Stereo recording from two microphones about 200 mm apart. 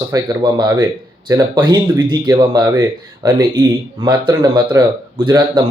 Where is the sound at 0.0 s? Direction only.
20° right (ahead or behind).